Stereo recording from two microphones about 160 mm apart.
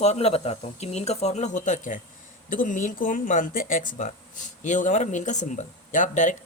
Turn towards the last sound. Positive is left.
turn(degrees=50)  # may be behind; listen again after turning